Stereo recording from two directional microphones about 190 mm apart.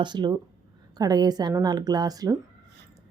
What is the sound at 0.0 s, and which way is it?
Speech, 25° right (ahead or behind).